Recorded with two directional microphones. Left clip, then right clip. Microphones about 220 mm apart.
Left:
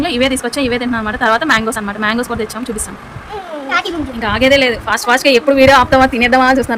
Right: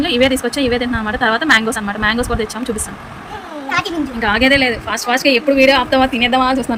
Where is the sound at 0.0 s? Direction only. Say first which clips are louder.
Right 1 dB; centre (ahead or behind).